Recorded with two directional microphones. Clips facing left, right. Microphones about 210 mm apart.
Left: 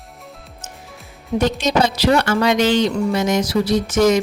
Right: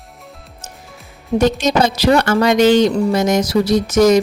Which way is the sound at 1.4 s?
45° right (ahead or behind).